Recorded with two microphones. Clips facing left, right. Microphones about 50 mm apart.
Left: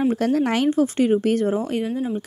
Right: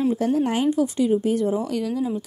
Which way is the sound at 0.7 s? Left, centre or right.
Left.